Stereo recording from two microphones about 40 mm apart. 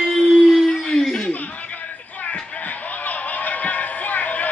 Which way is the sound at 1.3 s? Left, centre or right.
Left.